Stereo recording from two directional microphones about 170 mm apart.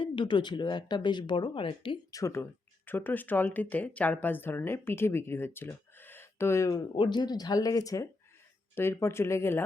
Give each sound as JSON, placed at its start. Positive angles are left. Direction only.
{"t": 0.0, "sound": "speech", "side_deg": 30}